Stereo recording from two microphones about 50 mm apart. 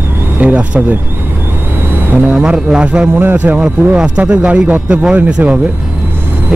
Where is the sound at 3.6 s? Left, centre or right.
Right.